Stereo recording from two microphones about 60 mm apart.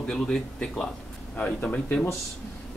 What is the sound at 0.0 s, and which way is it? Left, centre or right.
Speech, centre.